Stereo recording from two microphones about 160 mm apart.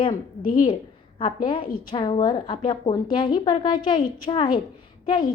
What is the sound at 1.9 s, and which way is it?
A woman's voice, 30° left (ahead or behind).